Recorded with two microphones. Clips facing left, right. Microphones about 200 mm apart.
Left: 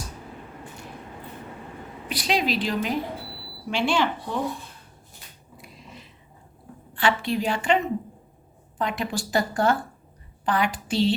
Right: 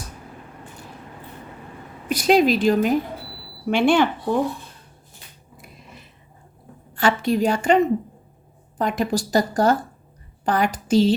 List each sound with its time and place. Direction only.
2.0 s a woman's voice: 45° right (ahead or behind)
5.5 s a sound: 50° right (ahead or behind)
6.9 s a woman's voice: 45° right (ahead or behind)
8.8 s a woman's voice: 45° right (ahead or behind)